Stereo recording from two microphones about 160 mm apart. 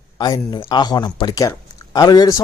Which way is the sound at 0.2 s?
25° left (ahead or behind).